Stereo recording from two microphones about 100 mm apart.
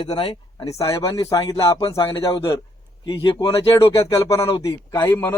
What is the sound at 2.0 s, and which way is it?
Speech, 55° left (ahead or behind).